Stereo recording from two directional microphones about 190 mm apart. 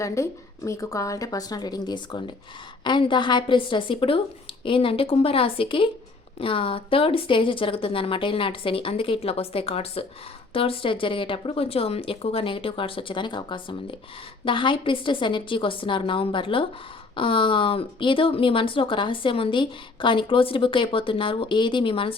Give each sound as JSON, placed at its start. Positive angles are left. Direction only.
{"t": 0.0, "sound": "speech", "side_deg": 15}